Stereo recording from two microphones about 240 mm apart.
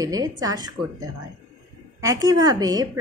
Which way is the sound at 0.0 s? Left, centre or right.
Centre.